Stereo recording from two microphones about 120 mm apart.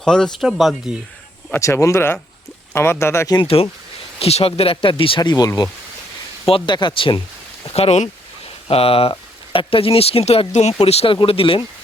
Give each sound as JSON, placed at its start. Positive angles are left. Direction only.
{"t": 0.0, "sound": "speech", "side_deg": 5}
{"t": 1.5, "sound": "speech", "side_deg": 25}
{"t": 3.4, "sound": "speech", "side_deg": 55}
{"t": 5.3, "sound": "speech", "side_deg": 30}
{"t": 6.4, "sound": "speech", "side_deg": 45}
{"t": 7.7, "sound": "speech", "side_deg": 60}
{"t": 10.8, "sound": "speech", "side_deg": 55}